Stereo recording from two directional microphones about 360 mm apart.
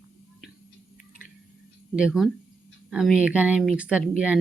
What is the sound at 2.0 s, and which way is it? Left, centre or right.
Speech, centre.